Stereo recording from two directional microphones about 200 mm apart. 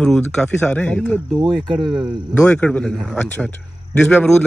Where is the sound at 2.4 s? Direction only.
5° left (ahead or behind).